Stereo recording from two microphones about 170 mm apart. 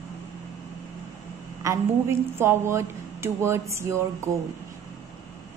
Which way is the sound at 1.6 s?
15° right (ahead or behind).